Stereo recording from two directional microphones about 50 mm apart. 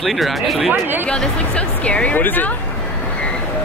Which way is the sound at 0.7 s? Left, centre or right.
Right.